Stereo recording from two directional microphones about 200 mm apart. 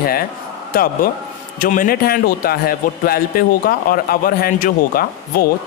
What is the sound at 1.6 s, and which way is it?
A man's voice, 45° left (ahead or behind).